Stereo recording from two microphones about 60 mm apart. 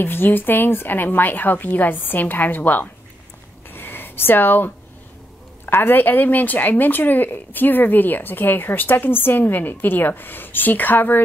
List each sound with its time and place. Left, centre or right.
0.0 s speech: left
3.7 s a sound: left
5.7 s speech: left